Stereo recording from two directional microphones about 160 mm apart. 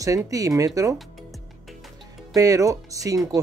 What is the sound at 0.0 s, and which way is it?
Speech, 20° right (ahead or behind).